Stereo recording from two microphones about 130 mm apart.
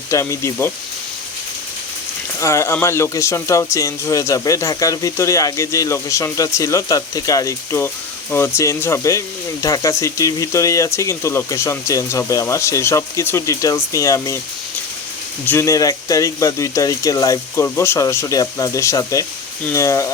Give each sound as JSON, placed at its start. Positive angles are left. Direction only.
{"t": 0.1, "sound": "speech", "side_deg": 25}
{"t": 2.4, "sound": "speech", "side_deg": 25}
{"t": 15.4, "sound": "speech", "side_deg": 20}